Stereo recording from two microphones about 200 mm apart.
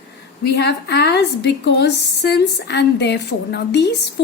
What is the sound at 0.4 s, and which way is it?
A woman's voice, 55° left (ahead or behind).